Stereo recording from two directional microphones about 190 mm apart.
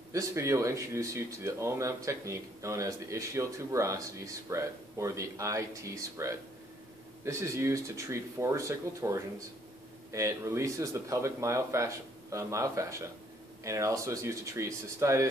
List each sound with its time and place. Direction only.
0.1 s speech: 15° right (ahead or behind)